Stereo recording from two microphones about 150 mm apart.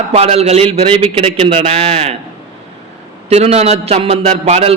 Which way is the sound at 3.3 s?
45° right (ahead or behind).